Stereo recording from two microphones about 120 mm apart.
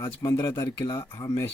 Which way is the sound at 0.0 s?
25° left (ahead or behind).